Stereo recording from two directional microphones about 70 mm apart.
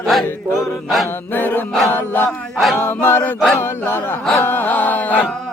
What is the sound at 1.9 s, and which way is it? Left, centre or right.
Chant, left.